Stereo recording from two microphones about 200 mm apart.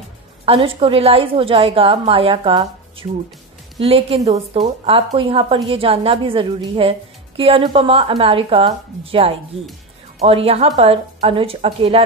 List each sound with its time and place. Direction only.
0.5 s a woman's voice: 30° right (ahead or behind)